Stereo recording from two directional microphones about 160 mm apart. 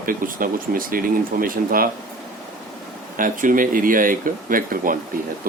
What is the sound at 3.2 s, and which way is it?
Speech, 60° right (ahead or behind).